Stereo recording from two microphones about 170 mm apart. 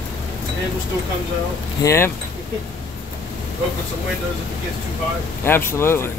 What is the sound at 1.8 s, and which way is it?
Speech, 15° left (ahead or behind).